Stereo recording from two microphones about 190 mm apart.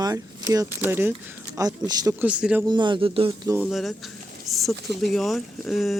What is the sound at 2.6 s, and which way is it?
Speech, 25° right (ahead or behind).